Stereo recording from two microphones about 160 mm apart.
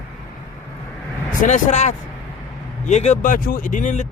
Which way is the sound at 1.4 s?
50° left (ahead or behind).